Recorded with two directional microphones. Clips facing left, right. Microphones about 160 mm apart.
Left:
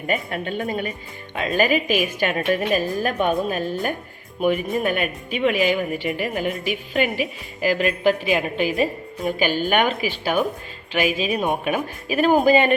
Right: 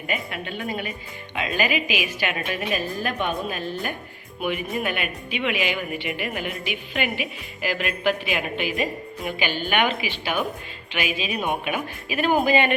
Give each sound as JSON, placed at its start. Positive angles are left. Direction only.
{"t": 0.1, "sound": "a woman's voice", "side_deg": 45}